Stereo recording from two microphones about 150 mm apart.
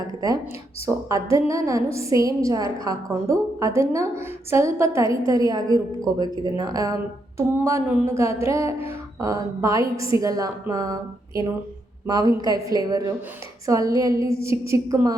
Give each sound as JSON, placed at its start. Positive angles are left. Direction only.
{"t": 1.0, "sound": "a woman's voice", "side_deg": -20}
{"t": 12.0, "sound": "a woman's voice", "side_deg": -25}